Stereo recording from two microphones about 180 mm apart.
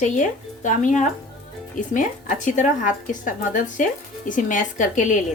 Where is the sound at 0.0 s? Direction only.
45° left (ahead or behind).